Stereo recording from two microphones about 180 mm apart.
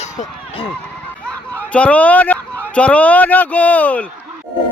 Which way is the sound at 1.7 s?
10° left (ahead or behind).